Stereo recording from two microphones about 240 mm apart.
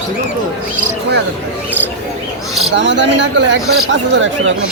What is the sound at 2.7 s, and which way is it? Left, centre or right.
Speech, right.